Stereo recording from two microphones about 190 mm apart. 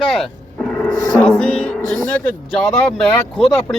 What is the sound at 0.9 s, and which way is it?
Speech, 40° right (ahead or behind).